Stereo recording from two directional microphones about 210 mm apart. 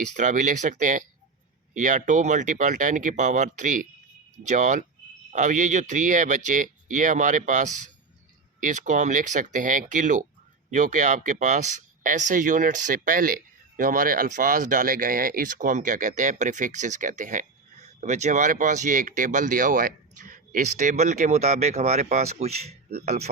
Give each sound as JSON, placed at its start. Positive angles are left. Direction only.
{"t": 0.2, "sound": "speech", "side_deg": -35}